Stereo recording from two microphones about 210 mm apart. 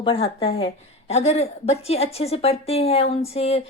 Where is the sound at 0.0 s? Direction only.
25° left (ahead or behind).